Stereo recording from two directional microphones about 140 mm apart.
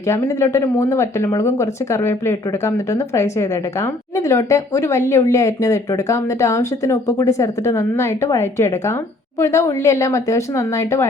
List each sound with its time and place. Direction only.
0.1 s speech: 20° left (ahead or behind)